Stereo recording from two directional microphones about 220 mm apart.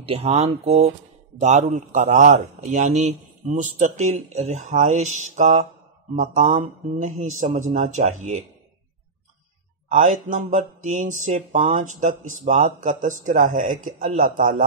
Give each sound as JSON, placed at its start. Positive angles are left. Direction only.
{"t": 0.0, "sound": "speech", "side_deg": -30}
{"t": 9.8, "sound": "speech", "side_deg": -35}